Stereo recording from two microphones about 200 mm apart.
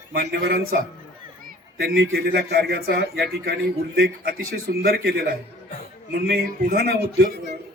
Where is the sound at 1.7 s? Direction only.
55° right (ahead or behind).